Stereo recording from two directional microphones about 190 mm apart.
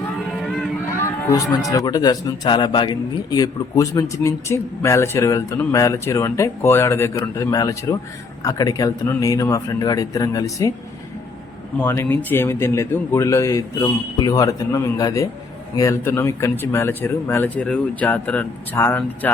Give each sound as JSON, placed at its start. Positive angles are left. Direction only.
{"t": 0.4, "sound": "a sound", "side_deg": 5}
{"t": 1.0, "sound": "speech", "side_deg": 15}
{"t": 11.8, "sound": "speech", "side_deg": 10}